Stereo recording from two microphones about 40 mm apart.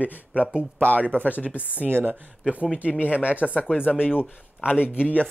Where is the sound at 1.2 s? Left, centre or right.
Left.